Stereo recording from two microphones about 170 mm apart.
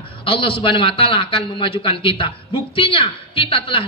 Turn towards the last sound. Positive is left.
turn(degrees=30)  # may be behind; listen again after turning